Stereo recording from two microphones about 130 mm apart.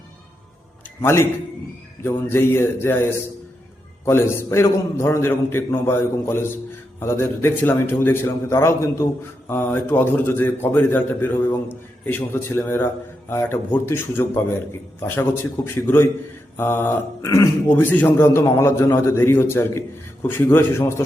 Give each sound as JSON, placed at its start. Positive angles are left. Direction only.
{"t": 1.0, "sound": "a man's voice", "side_deg": 20}
{"t": 4.0, "sound": "a man's voice", "side_deg": 20}